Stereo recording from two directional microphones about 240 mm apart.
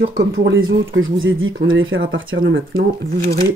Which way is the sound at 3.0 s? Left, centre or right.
Right.